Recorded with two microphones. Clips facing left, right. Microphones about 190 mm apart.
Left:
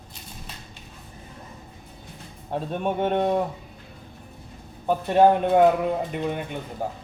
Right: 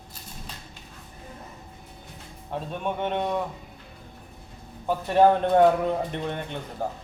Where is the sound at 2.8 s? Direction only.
45° left (ahead or behind).